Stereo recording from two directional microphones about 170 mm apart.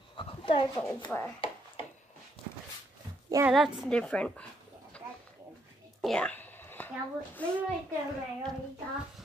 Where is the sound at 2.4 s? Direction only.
30° left (ahead or behind).